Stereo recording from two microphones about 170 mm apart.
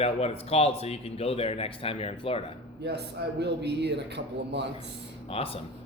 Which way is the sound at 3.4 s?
80° right.